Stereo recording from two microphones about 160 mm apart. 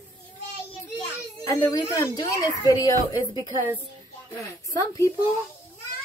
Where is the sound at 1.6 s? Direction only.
20° left (ahead or behind).